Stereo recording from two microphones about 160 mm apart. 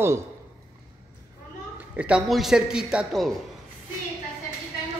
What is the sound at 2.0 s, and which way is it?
A man's voice, 5° right (ahead or behind).